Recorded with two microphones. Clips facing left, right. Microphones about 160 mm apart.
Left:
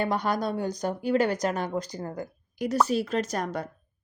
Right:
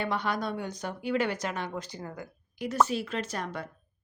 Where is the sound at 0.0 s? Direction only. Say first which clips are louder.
Left 4 dB; 40° left (ahead or behind).